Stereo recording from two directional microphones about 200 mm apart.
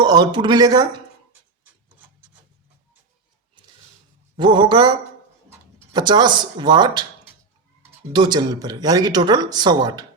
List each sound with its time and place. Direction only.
0.0 s speech: 20° right (ahead or behind)
4.4 s speech: 25° right (ahead or behind)